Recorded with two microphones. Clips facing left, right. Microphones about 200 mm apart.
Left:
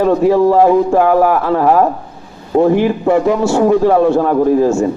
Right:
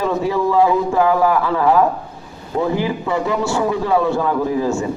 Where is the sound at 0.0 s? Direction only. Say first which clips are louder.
Left 8 dB; 50° left (ahead or behind).